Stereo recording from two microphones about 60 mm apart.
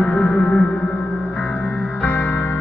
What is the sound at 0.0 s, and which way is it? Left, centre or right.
Gong, left.